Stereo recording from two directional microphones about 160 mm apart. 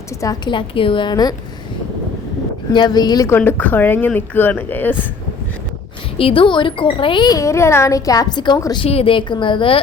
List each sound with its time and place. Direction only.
0.2 s speech: 25° left (ahead or behind)
2.7 s a woman's voice: 25° left (ahead or behind)
6.1 s speech: 35° left (ahead or behind)
8.8 s a woman's voice: 35° left (ahead or behind)